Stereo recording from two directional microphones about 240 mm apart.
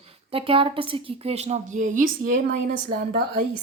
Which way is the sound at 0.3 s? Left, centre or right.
Right.